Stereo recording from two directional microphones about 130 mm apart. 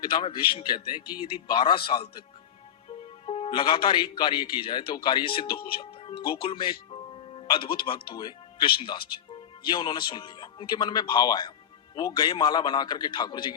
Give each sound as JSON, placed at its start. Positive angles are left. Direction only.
{"t": 0.0, "sound": "a man's voice", "side_deg": 40}
{"t": 3.2, "sound": "a man's voice", "side_deg": 45}